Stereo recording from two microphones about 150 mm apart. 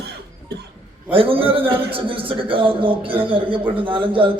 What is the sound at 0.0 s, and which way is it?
Cough, 90° right.